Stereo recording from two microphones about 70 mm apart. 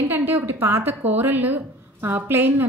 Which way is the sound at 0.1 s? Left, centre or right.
Right.